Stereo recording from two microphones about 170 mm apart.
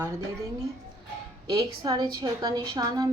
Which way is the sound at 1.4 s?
25° right (ahead or behind).